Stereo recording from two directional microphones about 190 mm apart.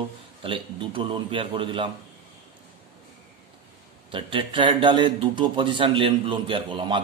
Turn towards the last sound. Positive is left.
turn(degrees=-25)  # may be behind; listen again after turning